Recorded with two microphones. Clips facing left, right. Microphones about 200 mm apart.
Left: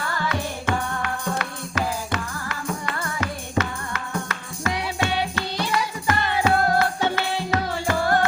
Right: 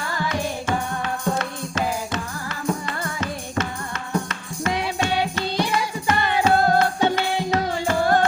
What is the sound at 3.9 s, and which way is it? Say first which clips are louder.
Music: right 3 dB; 25° right (ahead or behind).